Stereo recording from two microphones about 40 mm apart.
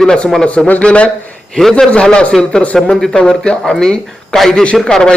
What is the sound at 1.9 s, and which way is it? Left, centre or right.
A man's voice, left.